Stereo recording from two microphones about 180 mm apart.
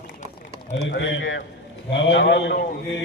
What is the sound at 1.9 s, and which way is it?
Speech, 80° left.